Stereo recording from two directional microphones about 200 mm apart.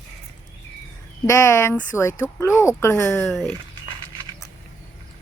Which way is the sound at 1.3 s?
15° left (ahead or behind).